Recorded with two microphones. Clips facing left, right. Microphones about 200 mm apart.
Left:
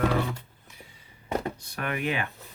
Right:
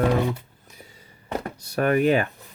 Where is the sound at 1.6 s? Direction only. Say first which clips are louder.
Right 11 dB; 40° right (ahead or behind).